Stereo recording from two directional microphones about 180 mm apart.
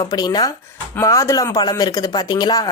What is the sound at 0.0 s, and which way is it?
Speech, 20° left (ahead or behind).